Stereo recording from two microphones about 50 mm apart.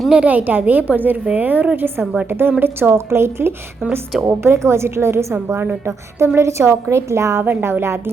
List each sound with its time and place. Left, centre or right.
0.2 s a woman's voice: right
2.9 s a woman's voice: right
4.2 s a woman's voice: right
7.6 s a woman's voice: right